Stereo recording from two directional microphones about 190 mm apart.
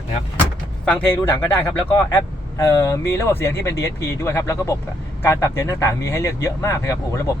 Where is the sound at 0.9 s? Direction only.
10° left (ahead or behind).